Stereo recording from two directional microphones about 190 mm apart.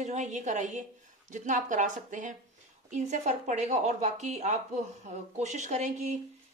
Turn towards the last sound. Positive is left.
turn(degrees=-35)  # may be behind; listen again after turning